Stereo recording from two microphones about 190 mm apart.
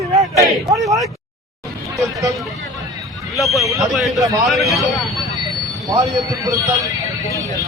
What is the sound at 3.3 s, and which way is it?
Speech, centre (ahead or behind).